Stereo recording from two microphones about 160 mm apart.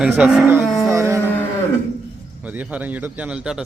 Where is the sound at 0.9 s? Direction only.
20° right (ahead or behind).